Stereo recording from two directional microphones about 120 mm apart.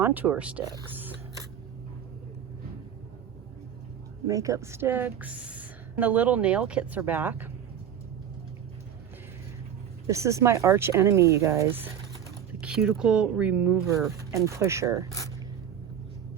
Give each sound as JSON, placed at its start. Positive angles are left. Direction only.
{"t": 0.0, "sound": "a woman's voice", "side_deg": -15}
{"t": 4.3, "sound": "a woman's voice", "side_deg": -25}
{"t": 10.1, "sound": "speech", "side_deg": -25}
{"t": 12.5, "sound": "a woman's voice", "side_deg": -5}
{"t": 13.8, "sound": "speech", "side_deg": -25}